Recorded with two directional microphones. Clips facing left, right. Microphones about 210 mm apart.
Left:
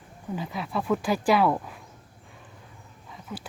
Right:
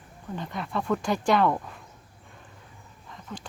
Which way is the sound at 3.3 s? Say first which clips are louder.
Left 2 dB; 5° left (ahead or behind).